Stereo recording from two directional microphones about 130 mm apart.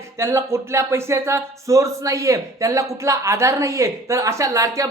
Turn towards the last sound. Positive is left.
turn(degrees=-25)  # may be behind; listen again after turning